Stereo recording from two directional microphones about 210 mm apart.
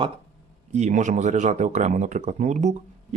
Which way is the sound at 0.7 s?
35° right (ahead or behind).